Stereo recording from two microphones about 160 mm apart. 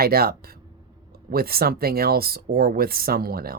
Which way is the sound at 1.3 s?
70° right (ahead or behind).